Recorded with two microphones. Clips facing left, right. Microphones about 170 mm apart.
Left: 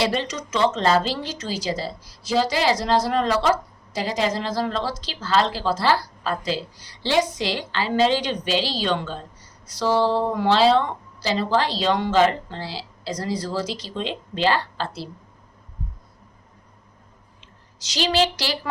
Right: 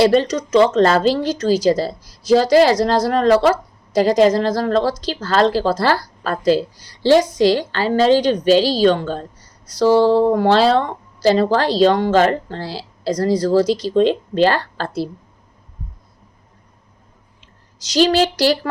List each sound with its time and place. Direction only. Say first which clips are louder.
0.0 s a woman's voice: right 10 dB; 40° right (ahead or behind)
17.9 s a woman's voice: right 7 dB; 45° right (ahead or behind)